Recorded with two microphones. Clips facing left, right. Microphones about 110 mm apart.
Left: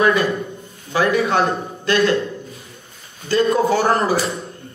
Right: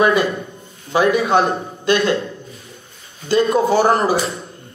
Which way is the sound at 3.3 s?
25° right (ahead or behind).